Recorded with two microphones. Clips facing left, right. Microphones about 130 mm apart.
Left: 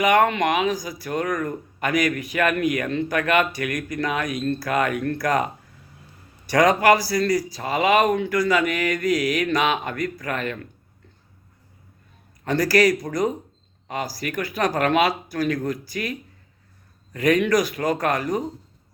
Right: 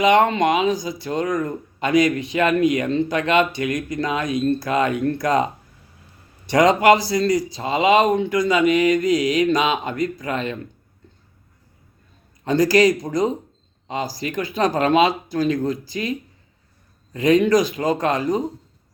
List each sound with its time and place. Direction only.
0.0 s speech: 25° right (ahead or behind)
6.5 s speech: 25° right (ahead or behind)
12.5 s speech: 20° right (ahead or behind)